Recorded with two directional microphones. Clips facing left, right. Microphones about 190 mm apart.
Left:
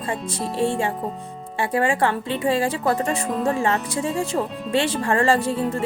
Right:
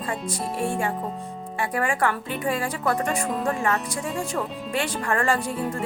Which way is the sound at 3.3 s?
5° left (ahead or behind).